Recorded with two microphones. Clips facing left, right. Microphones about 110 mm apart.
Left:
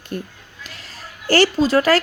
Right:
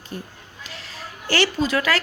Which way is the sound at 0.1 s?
60° left (ahead or behind).